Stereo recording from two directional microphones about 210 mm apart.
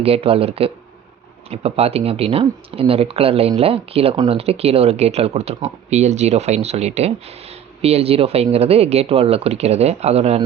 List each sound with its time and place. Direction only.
0.0 s speech: 30° right (ahead or behind)